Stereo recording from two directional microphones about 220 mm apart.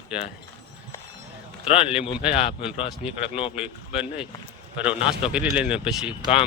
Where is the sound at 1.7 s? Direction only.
25° left (ahead or behind).